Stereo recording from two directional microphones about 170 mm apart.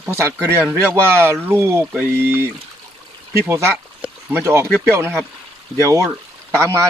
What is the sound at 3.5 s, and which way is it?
Speech, 15° right (ahead or behind).